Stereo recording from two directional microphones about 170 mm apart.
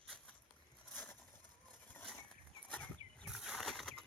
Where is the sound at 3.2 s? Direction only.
Centre (ahead or behind).